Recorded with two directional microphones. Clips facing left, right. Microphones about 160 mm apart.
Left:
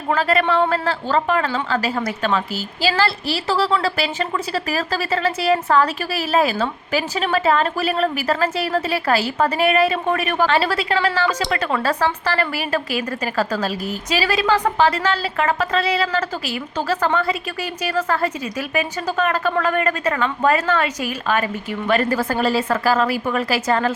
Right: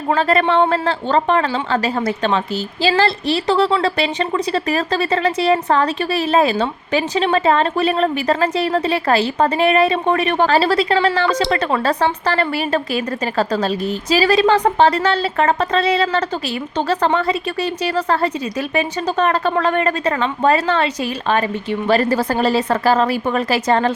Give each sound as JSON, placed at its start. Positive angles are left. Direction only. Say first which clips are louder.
{"t": 0.1, "sound": "speech", "louder": "right 2 dB", "side_deg": -35}
{"t": 3.5, "sound": "a woman's voice", "louder": "right 2 dB", "side_deg": -30}